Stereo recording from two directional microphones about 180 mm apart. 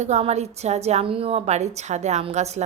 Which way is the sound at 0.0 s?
35° right (ahead or behind).